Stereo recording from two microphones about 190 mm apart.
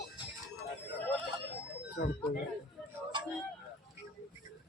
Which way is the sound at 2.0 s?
60° left (ahead or behind).